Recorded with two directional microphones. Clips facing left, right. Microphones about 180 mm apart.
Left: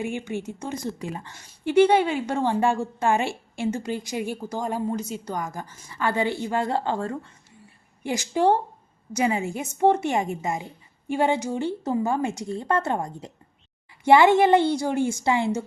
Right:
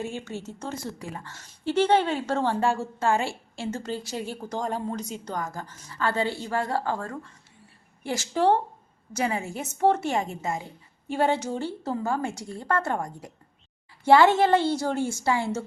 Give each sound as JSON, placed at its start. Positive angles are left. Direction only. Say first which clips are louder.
{"t": 0.0, "sound": "a woman's voice", "louder": "left 4 dB", "side_deg": 15}
{"t": 8.0, "sound": "a woman's voice", "louder": "left 2 dB", "side_deg": 15}